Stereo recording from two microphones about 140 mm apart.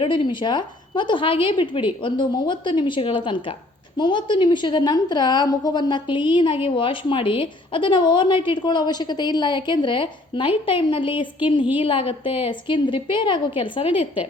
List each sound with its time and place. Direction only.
0.0 s a woman's voice: 35° left (ahead or behind)